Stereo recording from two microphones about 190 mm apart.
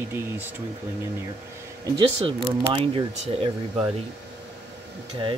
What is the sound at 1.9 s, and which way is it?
Speech, 25° right (ahead or behind).